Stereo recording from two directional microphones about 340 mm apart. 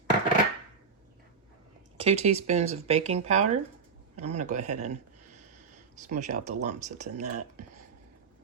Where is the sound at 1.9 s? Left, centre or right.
Centre.